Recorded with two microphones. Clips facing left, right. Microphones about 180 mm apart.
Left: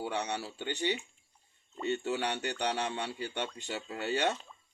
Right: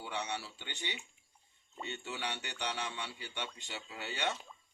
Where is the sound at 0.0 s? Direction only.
50° left (ahead or behind).